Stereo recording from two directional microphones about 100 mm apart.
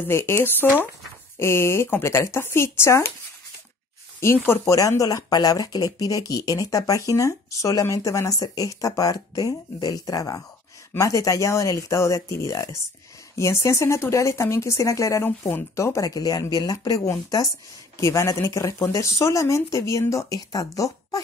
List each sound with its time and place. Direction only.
0.0 s speech: 25° left (ahead or behind)
4.2 s speech: 25° left (ahead or behind)